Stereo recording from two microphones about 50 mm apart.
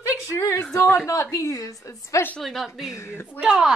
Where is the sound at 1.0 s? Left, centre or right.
Left.